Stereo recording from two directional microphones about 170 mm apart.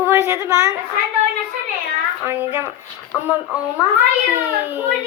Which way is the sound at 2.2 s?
10° right (ahead or behind).